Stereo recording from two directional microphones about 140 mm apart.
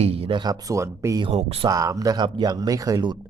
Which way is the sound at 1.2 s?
45° right (ahead or behind).